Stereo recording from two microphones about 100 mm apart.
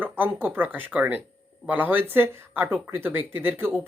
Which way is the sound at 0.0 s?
20° right (ahead or behind).